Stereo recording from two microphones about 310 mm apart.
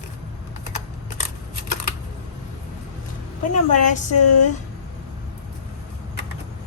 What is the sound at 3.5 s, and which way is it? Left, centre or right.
Speech, left.